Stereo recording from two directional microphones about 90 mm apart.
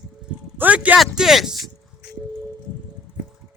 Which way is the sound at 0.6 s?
15° right (ahead or behind).